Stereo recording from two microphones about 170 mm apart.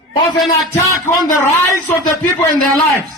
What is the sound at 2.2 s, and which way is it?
Speech, 5° left (ahead or behind).